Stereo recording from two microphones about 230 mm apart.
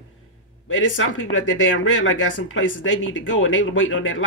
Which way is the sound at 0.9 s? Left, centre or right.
Left.